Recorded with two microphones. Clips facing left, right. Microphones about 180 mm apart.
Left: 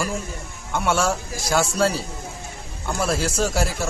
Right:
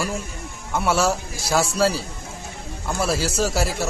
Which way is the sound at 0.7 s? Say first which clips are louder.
Right 1 dB; 5° right (ahead or behind).